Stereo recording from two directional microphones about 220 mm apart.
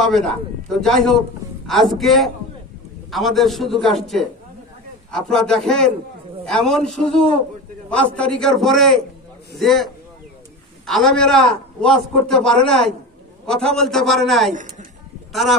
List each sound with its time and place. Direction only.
0.0 s a man's voice: centre (ahead or behind)
10.9 s a man's voice: centre (ahead or behind)
14.5 s a woman's voice: 35° right (ahead or behind)